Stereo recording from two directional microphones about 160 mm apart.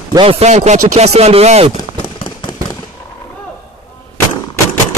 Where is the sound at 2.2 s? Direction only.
30° left (ahead or behind).